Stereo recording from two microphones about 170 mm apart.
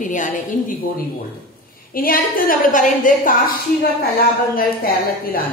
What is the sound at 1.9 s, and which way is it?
A woman's voice, 60° left (ahead or behind).